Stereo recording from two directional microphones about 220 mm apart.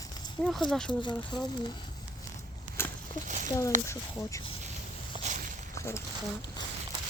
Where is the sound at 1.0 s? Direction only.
20° left (ahead or behind).